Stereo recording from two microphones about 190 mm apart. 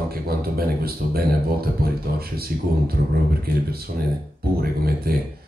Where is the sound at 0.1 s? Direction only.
55° right (ahead or behind).